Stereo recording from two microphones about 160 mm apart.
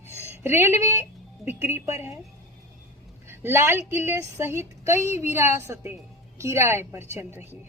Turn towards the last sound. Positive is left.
turn(degrees=-15)  # may be behind; listen again after turning